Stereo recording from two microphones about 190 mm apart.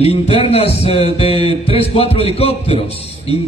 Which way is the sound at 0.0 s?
30° left (ahead or behind).